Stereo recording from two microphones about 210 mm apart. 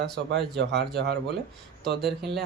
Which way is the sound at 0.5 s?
55° right (ahead or behind).